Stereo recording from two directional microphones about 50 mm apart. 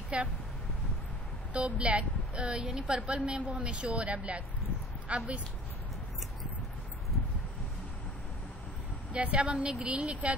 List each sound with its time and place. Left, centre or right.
0.1 s speech: right
1.5 s a woman's voice: right
9.1 s a woman's voice: right